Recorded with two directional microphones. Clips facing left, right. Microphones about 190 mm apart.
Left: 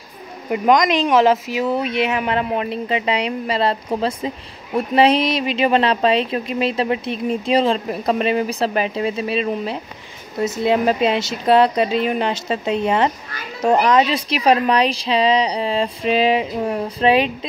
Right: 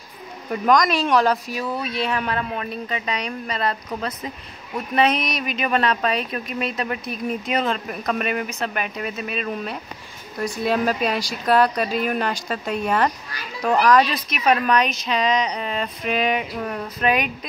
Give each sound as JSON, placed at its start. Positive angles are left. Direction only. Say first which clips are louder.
{"t": 0.5, "sound": "a woman's voice", "louder": "left 3 dB", "side_deg": 20}